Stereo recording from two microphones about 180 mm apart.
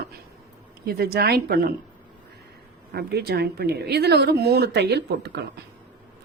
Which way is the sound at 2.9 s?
65° right (ahead or behind).